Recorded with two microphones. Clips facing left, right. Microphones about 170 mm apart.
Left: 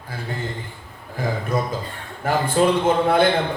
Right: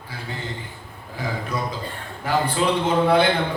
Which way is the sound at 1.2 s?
50° left (ahead or behind).